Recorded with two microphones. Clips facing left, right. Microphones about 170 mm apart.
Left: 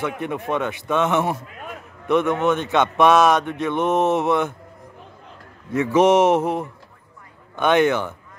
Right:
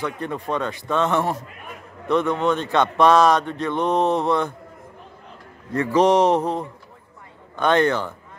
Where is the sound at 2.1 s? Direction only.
20° left (ahead or behind).